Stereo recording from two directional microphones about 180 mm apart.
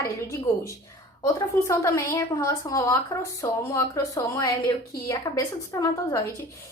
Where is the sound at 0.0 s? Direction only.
15° left (ahead or behind).